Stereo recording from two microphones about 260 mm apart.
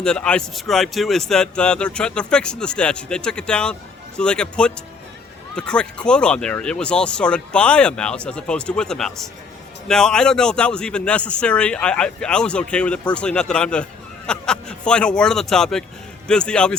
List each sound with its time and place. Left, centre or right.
0.0 s speech: centre